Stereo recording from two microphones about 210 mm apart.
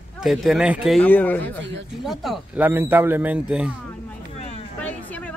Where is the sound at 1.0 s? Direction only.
10° left (ahead or behind).